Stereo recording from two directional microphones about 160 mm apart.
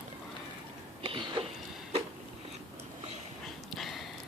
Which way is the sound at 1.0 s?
35° right (ahead or behind).